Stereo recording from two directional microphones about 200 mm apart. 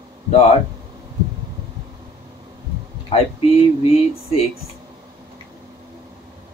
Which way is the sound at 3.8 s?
30° left (ahead or behind).